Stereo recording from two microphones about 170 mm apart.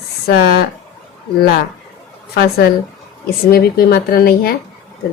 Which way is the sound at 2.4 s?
70° left (ahead or behind).